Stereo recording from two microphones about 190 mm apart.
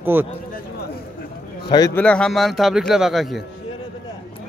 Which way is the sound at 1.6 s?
20° left (ahead or behind).